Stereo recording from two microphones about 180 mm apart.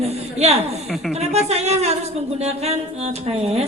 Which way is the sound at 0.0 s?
35° right (ahead or behind).